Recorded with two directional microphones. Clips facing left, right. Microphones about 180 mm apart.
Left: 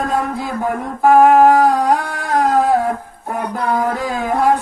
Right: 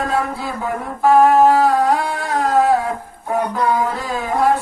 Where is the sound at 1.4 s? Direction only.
15° left (ahead or behind).